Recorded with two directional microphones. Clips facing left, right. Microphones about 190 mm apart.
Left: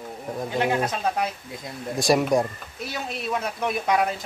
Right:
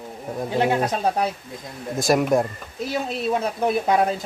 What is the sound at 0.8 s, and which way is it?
Speech, 35° right (ahead or behind).